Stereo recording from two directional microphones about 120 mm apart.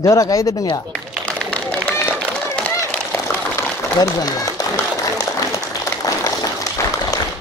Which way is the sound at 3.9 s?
30° left (ahead or behind).